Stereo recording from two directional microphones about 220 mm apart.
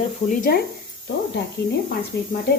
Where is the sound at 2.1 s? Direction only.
50° left (ahead or behind).